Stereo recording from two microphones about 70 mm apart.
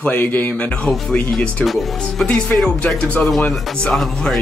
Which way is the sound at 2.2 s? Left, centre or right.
Left.